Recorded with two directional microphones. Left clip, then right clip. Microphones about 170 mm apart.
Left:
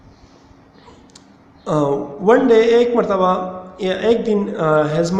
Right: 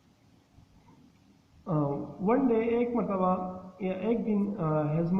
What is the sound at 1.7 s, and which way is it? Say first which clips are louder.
A man's voice: left 14 dB; 20° left (ahead or behind).